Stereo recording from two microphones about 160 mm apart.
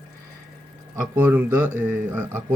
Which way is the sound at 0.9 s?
15° right (ahead or behind).